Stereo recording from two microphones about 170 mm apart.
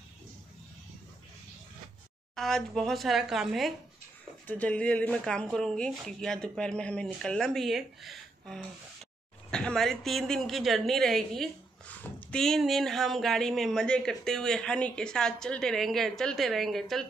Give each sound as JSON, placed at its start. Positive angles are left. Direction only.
{"t": 2.3, "sound": "speech", "side_deg": 0}